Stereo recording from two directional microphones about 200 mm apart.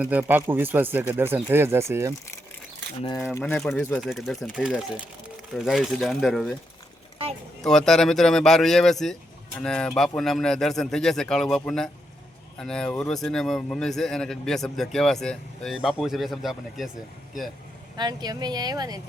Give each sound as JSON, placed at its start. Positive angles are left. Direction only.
{"t": 0.0, "sound": "speech", "side_deg": -10}
{"t": 3.3, "sound": "speech", "side_deg": 5}
{"t": 7.6, "sound": "speech", "side_deg": 0}
{"t": 17.9, "sound": "speech", "side_deg": -20}